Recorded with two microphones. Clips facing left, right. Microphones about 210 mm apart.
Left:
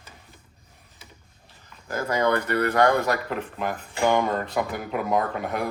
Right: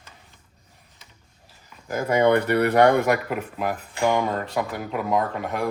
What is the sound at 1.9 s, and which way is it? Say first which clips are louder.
Speech: right 4 dB; 20° right (ahead or behind).